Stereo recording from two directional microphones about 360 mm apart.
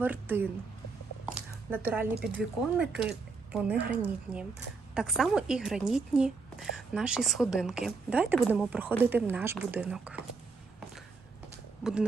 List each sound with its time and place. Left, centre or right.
0.0 s a woman's voice: centre
1.7 s a woman's voice: centre
11.8 s speech: centre